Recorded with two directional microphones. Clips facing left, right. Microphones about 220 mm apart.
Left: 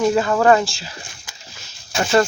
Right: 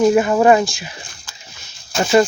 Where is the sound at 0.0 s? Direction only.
20° right (ahead or behind).